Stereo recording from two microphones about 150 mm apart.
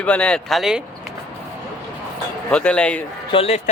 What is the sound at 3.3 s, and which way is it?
Speech, 40° left (ahead or behind).